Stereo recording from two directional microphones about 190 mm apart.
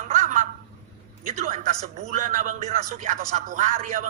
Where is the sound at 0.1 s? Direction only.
40° right (ahead or behind).